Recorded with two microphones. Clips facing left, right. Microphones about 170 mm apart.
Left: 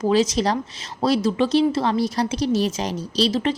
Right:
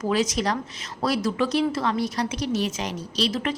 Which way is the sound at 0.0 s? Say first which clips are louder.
Left 5 dB; 30° left (ahead or behind).